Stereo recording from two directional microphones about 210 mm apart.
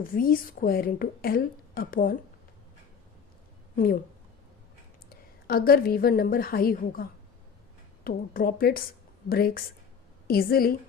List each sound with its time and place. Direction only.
0.0 s a woman's voice: 40° left (ahead or behind)
5.0 s a woman's voice: 45° left (ahead or behind)